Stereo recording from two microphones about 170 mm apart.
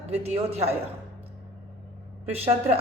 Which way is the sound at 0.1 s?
40° right (ahead or behind).